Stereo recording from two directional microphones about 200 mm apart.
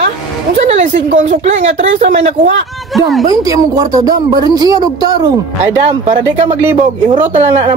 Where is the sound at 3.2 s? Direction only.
20° right (ahead or behind).